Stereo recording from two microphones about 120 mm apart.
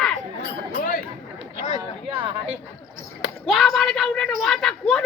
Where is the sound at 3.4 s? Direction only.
Centre (ahead or behind).